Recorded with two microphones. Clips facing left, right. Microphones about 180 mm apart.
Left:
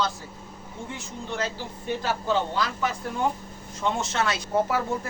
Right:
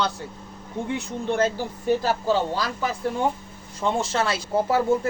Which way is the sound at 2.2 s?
35° right (ahead or behind).